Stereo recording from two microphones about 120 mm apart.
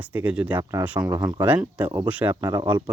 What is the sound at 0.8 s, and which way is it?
Speech, 10° right (ahead or behind).